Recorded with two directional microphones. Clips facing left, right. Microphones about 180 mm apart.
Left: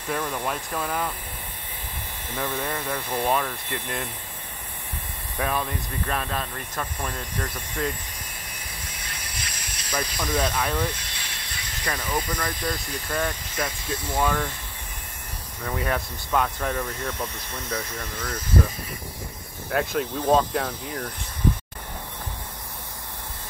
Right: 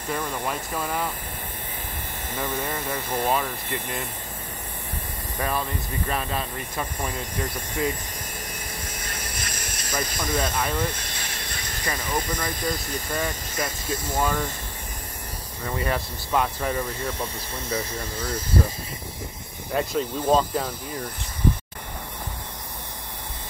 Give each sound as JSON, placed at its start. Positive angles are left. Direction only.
{"t": 0.1, "sound": "speech", "side_deg": 0}
{"t": 2.3, "sound": "speech", "side_deg": -5}
{"t": 5.4, "sound": "speech", "side_deg": 0}
{"t": 8.8, "sound": "mechanisms", "side_deg": -45}
{"t": 10.2, "sound": "speech", "side_deg": 0}
{"t": 11.0, "sound": "vehicle", "side_deg": -45}
{"t": 11.8, "sound": "speech", "side_deg": 0}
{"t": 15.6, "sound": "speech", "side_deg": 0}
{"t": 19.7, "sound": "speech", "side_deg": 0}